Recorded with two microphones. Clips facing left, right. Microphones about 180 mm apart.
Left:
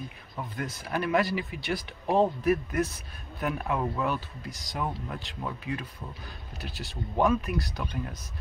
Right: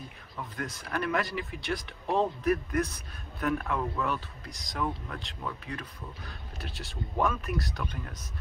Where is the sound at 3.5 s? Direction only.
15° left (ahead or behind).